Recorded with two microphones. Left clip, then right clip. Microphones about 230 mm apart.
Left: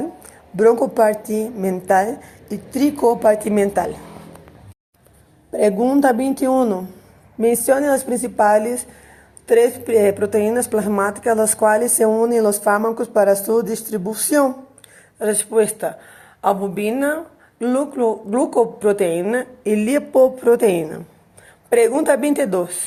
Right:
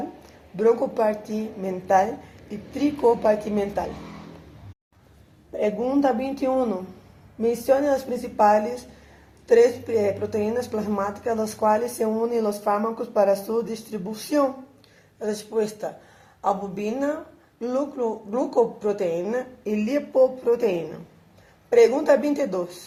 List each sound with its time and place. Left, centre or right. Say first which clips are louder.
0.5 s a woman's voice: left 6 dB; left
5.5 s a woman's voice: left 7 dB; left
15.2 s a woman's voice: left 8 dB; left